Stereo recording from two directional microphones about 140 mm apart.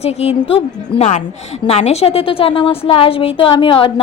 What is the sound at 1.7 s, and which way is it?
A woman's voice, 50° left (ahead or behind).